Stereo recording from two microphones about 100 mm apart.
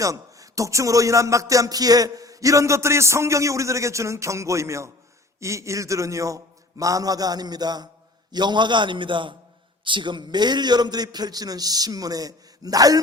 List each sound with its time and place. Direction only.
0.0 s a man's voice: 35° right (ahead or behind)